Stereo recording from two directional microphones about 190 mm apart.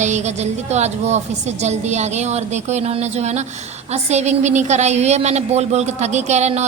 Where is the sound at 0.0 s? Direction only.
40° right (ahead or behind).